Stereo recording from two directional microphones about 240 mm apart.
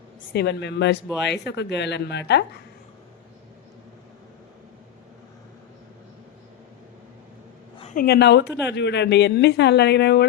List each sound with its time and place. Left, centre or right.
0.3 s a woman's voice: left
7.8 s a sound: left
8.0 s a woman's voice: left